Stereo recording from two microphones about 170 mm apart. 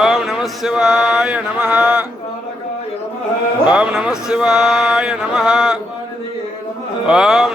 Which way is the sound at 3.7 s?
5° right (ahead or behind).